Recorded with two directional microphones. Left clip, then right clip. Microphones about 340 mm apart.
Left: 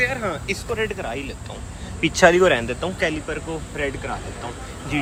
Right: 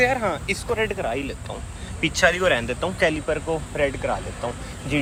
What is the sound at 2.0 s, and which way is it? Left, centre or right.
Speech, centre.